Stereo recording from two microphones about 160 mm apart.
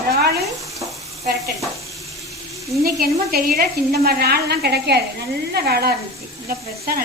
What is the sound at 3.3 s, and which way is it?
A woman's voice, 75° right (ahead or behind).